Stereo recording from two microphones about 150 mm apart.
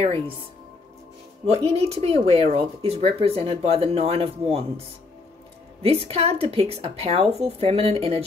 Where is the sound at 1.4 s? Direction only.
45° right (ahead or behind).